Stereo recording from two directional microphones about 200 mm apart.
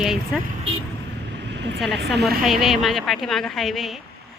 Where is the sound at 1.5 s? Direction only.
60° right (ahead or behind).